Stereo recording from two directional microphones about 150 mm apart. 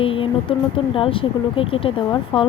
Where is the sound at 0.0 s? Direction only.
35° left (ahead or behind).